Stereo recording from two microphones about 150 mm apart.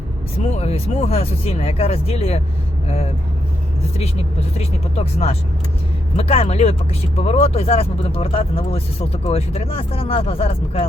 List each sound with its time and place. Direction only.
0.5 s speech: 45° left (ahead or behind)